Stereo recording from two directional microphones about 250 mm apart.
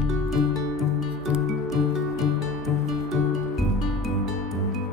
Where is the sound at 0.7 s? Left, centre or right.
Centre.